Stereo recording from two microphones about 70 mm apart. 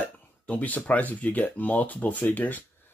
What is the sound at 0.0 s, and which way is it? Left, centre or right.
Speech, left.